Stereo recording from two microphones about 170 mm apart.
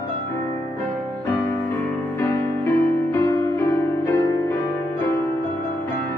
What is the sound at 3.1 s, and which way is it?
Music, 15° left (ahead or behind).